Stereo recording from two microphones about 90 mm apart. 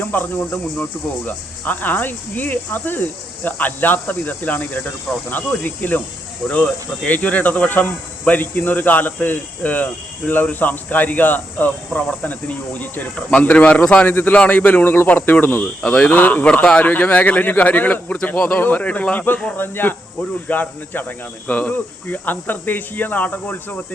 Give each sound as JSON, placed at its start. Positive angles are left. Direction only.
{"t": 0.0, "sound": "speech", "side_deg": 20}